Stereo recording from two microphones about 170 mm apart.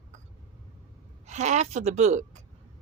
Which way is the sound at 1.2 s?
45° right (ahead or behind).